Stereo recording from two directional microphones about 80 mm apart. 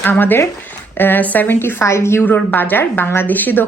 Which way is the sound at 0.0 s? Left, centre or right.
Left.